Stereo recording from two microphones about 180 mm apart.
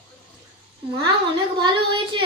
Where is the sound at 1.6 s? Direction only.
30° right (ahead or behind).